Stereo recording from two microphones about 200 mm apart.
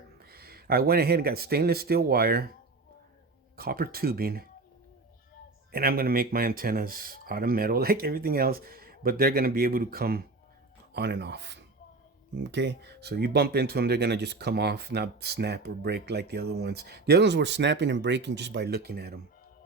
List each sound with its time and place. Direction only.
0.3 s speech: 50° right (ahead or behind)
3.6 s speech: 50° right (ahead or behind)
5.7 s speech: 45° right (ahead or behind)